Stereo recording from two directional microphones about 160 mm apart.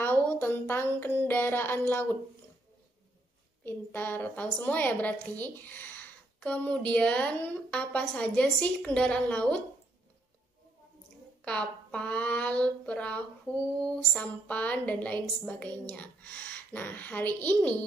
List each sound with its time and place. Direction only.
0.0 s a sound: 10° left (ahead or behind)
3.6 s a woman's voice: 10° left (ahead or behind)
11.4 s a woman's voice: 5° left (ahead or behind)